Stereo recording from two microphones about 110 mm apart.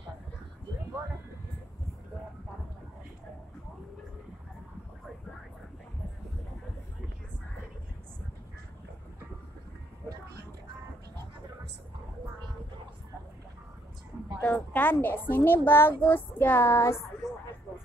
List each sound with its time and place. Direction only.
14.4 s a woman's voice: 15° left (ahead or behind)